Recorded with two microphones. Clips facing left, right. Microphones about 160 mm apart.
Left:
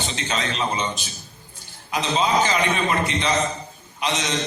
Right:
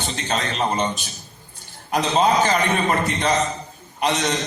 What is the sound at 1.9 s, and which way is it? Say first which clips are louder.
A man's voice: right 3 dB; 50° right (ahead or behind).